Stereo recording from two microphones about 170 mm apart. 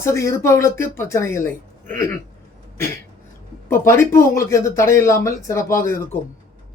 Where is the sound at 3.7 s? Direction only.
15° left (ahead or behind).